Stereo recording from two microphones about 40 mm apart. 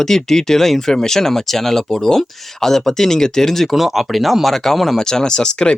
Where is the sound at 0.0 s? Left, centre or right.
Centre.